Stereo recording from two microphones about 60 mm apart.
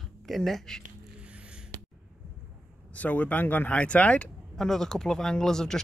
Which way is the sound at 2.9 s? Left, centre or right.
Left.